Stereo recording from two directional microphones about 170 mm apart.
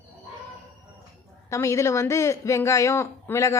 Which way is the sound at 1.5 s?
15° left (ahead or behind).